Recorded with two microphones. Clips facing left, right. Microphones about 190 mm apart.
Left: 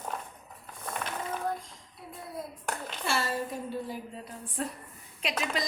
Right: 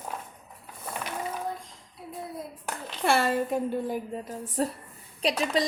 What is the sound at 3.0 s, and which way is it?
A woman's voice, 60° right (ahead or behind).